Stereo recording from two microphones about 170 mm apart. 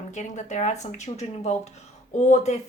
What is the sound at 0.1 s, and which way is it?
Speech, 45° left (ahead or behind).